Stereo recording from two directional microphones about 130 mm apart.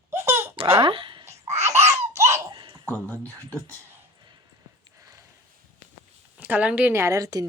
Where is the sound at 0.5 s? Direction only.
45° right (ahead or behind).